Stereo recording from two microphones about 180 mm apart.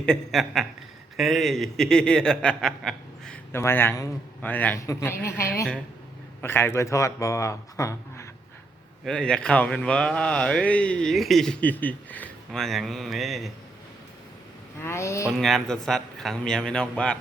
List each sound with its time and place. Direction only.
0.0 s speech: 5° left (ahead or behind)
6.4 s speech: 15° left (ahead or behind)
9.0 s speech: 5° left (ahead or behind)
14.8 s speech: 15° left (ahead or behind)
15.3 s speech: centre (ahead or behind)